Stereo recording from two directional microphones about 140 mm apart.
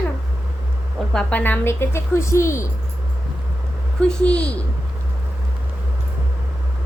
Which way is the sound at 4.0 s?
5° left (ahead or behind).